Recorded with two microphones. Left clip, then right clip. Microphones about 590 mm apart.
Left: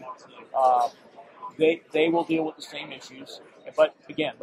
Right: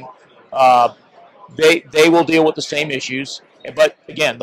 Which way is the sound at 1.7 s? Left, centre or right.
Right.